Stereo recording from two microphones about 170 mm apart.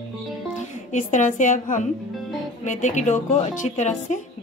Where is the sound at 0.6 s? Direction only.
45° left (ahead or behind).